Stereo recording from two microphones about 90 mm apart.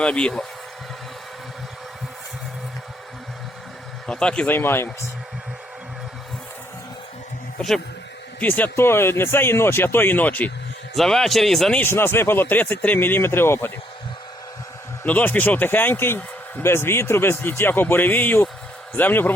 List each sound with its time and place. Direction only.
0.0 s a man's voice: 10° left (ahead or behind)
4.0 s a man's voice: 10° left (ahead or behind)
4.5 s speech: 25° left (ahead or behind)
8.4 s speech: 20° left (ahead or behind)
10.9 s speech: 5° left (ahead or behind)
11.8 s speech: 25° left (ahead or behind)
15.0 s speech: 20° left (ahead or behind)